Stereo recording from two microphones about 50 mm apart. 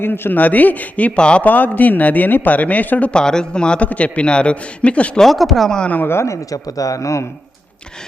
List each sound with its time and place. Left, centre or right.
0.0 s speech: left
1.5 s speech: left
3.1 s a man's voice: centre
5.1 s speech: centre
6.1 s speech: left
7.0 s speech: left